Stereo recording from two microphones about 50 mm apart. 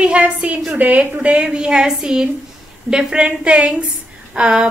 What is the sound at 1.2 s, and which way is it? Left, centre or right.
A woman's voice, right.